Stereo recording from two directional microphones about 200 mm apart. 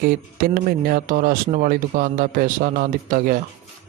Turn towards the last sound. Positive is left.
turn(degrees=-40)  # may be behind; listen again after turning